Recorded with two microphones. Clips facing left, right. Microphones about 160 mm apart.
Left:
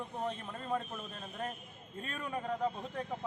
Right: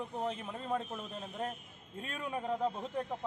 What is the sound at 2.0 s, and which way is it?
Speech, 10° right (ahead or behind).